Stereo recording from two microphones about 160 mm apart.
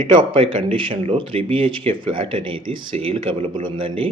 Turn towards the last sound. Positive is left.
turn(degrees=-35)  # may be behind; listen again after turning